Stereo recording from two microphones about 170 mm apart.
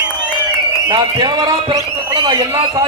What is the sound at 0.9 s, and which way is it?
A man's voice, 25° right (ahead or behind).